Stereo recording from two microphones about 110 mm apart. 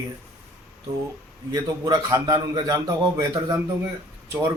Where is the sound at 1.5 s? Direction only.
35° right (ahead or behind).